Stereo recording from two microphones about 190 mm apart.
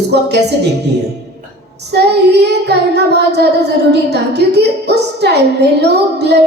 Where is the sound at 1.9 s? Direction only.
60° right (ahead or behind).